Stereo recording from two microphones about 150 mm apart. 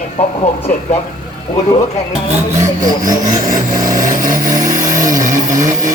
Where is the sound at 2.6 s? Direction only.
60° right (ahead or behind).